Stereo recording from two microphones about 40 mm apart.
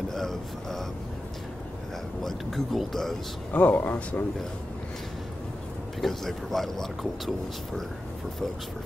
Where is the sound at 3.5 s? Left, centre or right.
Left.